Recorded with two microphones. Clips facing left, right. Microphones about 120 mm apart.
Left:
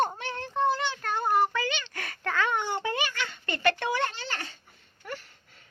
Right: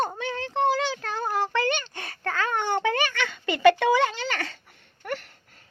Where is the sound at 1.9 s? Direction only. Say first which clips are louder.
Right 1 dB; 30° right (ahead or behind).